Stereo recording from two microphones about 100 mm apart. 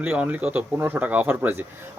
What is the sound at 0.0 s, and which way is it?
Speech, 15° right (ahead or behind).